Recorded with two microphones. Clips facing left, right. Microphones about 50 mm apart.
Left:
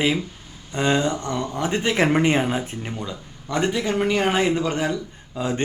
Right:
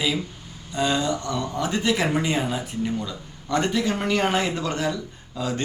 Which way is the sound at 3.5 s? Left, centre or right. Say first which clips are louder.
Left 1 dB; centre.